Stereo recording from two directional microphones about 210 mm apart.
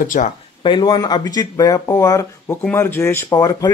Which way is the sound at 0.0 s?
40° left (ahead or behind).